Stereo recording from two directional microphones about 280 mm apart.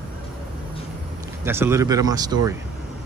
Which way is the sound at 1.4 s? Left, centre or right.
Centre.